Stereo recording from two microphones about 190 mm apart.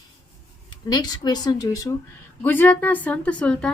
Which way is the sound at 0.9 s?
20° left (ahead or behind).